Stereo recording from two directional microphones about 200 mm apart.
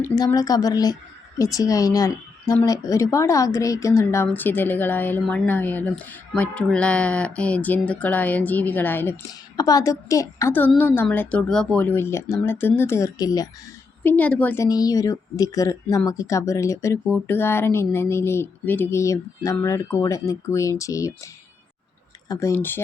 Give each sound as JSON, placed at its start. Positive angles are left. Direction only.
{"t": 0.0, "sound": "a woman's voice", "side_deg": 15}
{"t": 14.0, "sound": "a woman's voice", "side_deg": 10}
{"t": 22.3, "sound": "a woman's voice", "side_deg": 15}